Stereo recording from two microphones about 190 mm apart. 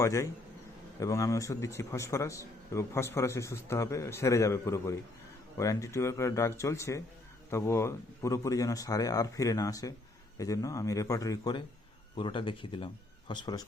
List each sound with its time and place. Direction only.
0.0 s a man's voice: 15° left (ahead or behind)